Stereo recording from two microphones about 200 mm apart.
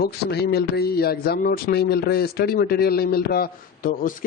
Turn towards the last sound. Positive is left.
turn(degrees=45)  # may be behind; listen again after turning